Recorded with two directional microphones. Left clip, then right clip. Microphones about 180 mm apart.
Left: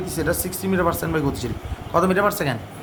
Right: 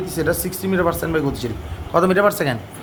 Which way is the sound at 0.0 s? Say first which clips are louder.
Right 3 dB; 15° right (ahead or behind).